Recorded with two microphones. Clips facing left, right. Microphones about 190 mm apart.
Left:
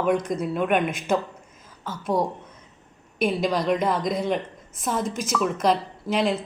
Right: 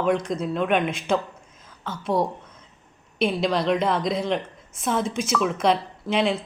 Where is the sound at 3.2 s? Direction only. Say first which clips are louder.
Even; centre (ahead or behind).